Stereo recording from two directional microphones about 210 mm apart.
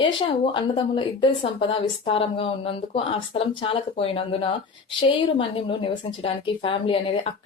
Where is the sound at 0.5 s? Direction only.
25° left (ahead or behind).